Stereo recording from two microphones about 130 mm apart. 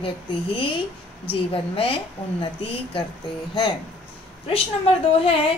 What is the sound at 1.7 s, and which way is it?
Speech, 45° left (ahead or behind).